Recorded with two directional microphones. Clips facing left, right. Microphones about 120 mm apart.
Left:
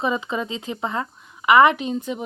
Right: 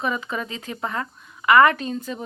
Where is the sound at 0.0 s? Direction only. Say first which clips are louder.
Left 3 dB; 20° left (ahead or behind).